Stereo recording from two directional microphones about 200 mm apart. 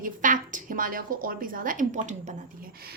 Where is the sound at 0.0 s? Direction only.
40° right (ahead or behind).